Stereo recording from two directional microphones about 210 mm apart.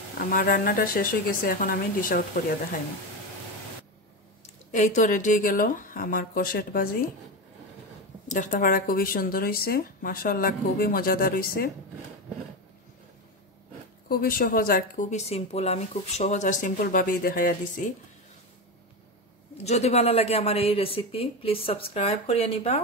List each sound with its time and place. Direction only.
0.2 s speech: 45° left (ahead or behind)
4.7 s speech: 35° left (ahead or behind)
8.3 s speech: 40° left (ahead or behind)
14.0 s speech: 45° left (ahead or behind)
19.5 s speech: 30° left (ahead or behind)